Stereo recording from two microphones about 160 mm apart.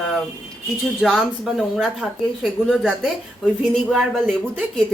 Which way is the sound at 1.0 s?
Centre (ahead or behind).